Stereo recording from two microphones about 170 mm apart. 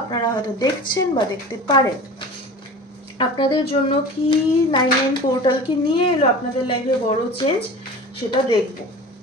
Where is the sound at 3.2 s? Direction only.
25° left (ahead or behind).